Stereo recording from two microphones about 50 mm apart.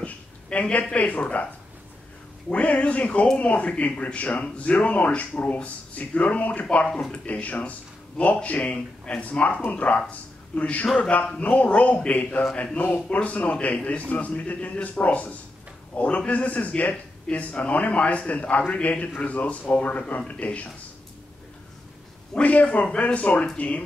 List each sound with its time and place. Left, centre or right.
0.0 s a sound: left
0.9 s a man's voice: left
2.5 s a man's voice: left
22.3 s speech: left